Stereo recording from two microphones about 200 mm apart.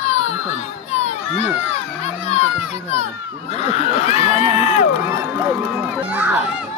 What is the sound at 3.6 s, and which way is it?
Speech, 35° left (ahead or behind).